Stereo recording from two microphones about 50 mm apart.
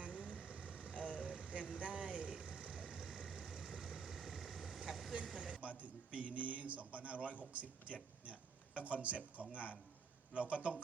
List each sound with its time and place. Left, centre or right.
0.0 s vehicle: right; by 5.5 s centre
5.6 s a man's voice: right